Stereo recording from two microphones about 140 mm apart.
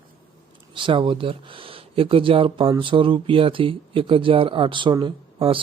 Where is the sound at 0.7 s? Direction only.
35° right (ahead or behind).